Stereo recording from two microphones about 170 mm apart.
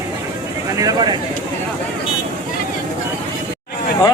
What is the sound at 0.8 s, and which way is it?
Speech, 25° right (ahead or behind).